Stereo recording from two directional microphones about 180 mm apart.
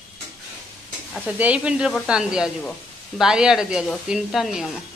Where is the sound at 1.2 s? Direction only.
10° right (ahead or behind).